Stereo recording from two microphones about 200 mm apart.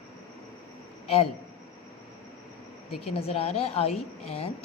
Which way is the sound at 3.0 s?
30° left (ahead or behind).